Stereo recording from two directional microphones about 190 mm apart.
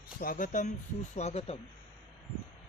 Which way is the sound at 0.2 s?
45° left (ahead or behind).